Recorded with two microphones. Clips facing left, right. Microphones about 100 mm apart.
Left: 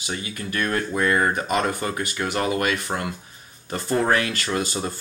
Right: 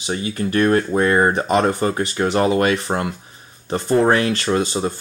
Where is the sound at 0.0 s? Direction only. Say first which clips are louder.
Right 8 dB; 30° right (ahead or behind).